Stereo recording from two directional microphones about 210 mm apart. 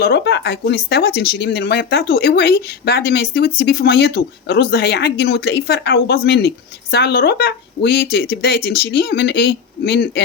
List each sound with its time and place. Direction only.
0.0 s speech: 55° left (ahead or behind)